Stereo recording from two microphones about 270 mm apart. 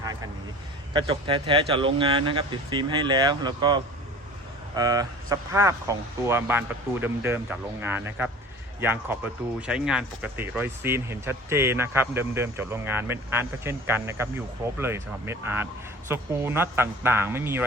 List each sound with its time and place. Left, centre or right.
0.9 s speech: centre